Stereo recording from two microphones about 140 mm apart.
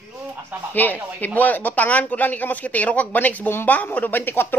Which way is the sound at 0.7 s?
10° left (ahead or behind).